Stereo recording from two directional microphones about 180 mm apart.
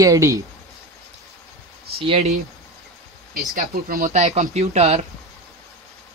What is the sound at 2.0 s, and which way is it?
Speech, 35° right (ahead or behind).